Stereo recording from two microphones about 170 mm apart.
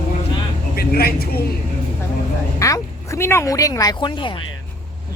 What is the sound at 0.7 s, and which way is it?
Speech, 65° left (ahead or behind).